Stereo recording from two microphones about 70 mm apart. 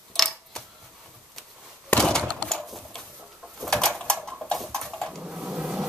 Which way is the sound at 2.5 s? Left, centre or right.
Centre.